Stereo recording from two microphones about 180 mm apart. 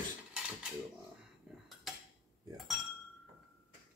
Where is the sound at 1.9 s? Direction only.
Centre (ahead or behind).